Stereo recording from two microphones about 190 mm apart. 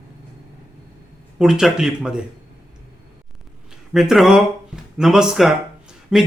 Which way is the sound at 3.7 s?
Centre (ahead or behind).